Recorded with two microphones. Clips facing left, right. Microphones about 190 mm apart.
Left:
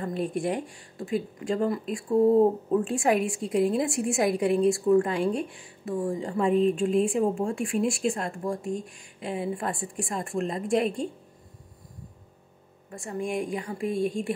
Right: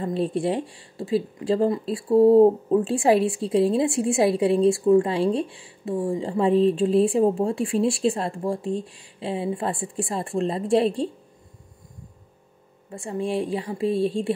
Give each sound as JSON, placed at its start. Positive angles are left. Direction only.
{"t": 0.0, "sound": "speech", "side_deg": -30}
{"t": 12.9, "sound": "speech", "side_deg": -30}